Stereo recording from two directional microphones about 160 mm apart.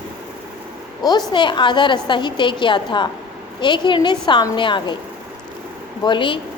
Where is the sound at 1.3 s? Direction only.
30° left (ahead or behind).